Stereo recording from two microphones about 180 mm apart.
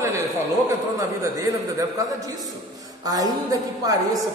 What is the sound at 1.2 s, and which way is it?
A man's voice, 20° right (ahead or behind).